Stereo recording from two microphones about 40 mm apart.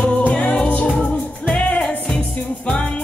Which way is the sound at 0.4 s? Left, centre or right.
Left.